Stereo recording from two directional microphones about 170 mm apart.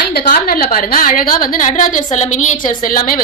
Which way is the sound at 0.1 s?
60° left (ahead or behind).